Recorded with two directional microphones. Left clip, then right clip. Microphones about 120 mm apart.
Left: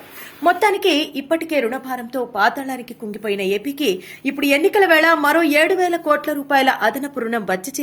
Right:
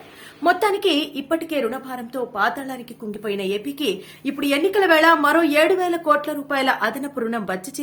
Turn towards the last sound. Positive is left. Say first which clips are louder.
# left 4 dB
turn(degrees=30)  # may be behind; listen again after turning